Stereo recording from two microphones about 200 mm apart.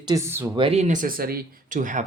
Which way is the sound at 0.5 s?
30° right (ahead or behind).